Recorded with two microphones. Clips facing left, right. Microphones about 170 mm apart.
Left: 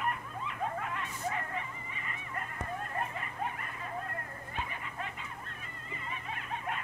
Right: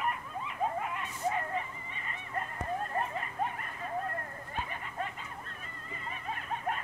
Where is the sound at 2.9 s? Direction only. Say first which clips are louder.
Right 3 dB; 35° right (ahead or behind).